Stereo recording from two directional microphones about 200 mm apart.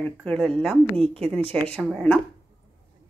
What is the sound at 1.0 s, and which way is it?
Speech, 30° right (ahead or behind).